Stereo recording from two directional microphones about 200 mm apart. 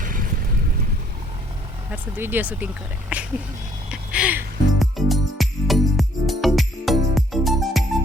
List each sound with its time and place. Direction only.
0.0 s boat: 45° right (ahead or behind)
1.9 s speech: 10° right (ahead or behind)
3.8 s music: 5° right (ahead or behind)